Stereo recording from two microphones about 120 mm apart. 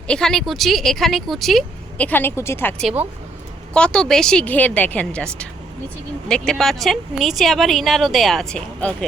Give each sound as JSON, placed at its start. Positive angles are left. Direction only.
{"t": 0.1, "sound": "speech", "side_deg": 5}
{"t": 2.0, "sound": "speech", "side_deg": 15}